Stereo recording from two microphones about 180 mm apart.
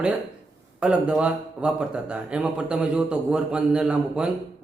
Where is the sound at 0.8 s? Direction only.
5° right (ahead or behind).